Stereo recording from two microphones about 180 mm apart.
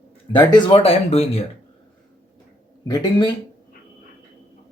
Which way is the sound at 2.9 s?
25° left (ahead or behind).